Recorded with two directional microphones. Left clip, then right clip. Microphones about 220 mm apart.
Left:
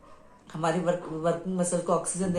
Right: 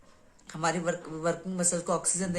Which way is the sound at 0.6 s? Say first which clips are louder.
Left 3 dB; 20° right (ahead or behind).